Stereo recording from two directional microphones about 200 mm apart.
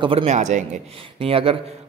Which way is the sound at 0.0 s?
30° right (ahead or behind).